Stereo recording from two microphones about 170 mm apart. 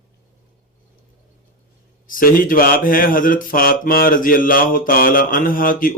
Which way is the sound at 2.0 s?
55° left (ahead or behind).